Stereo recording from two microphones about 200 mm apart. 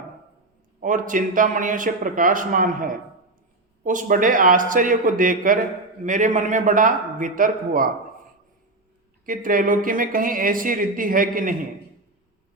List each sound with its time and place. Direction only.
0.8 s a man's voice: 40° right (ahead or behind)
9.2 s speech: 45° right (ahead or behind)